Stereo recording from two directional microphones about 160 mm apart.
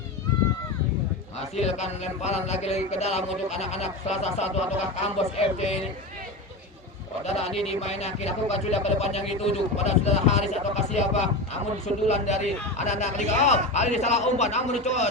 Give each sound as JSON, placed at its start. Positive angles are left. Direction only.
{"t": 1.4, "sound": "speech", "side_deg": 45}
{"t": 7.3, "sound": "speech", "side_deg": 40}